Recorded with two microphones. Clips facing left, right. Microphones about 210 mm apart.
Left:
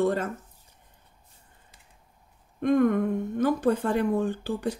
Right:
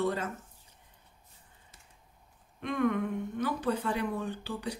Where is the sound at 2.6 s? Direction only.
45° left (ahead or behind).